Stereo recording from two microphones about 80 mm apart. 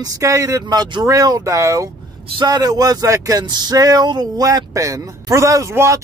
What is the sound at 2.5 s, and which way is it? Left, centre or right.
Speech, right.